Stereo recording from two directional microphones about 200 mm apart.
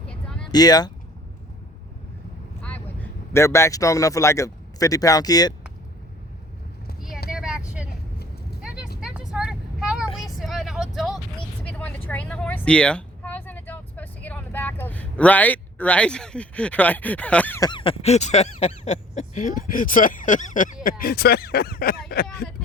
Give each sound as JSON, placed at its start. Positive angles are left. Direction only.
{"t": 0.1, "sound": "a sound", "side_deg": 5}
{"t": 0.5, "sound": "speech", "side_deg": 20}
{"t": 2.6, "sound": "speech", "side_deg": 5}
{"t": 7.3, "sound": "vehicle", "side_deg": -5}
{"t": 9.0, "sound": "vehicle", "side_deg": -5}
{"t": 11.6, "sound": "a sound", "side_deg": 5}
{"t": 17.7, "sound": "speech", "side_deg": 25}
{"t": 21.0, "sound": "speech", "side_deg": 50}